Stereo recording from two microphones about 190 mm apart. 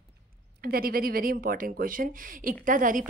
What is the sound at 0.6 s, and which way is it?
A woman's voice, 50° right (ahead or behind).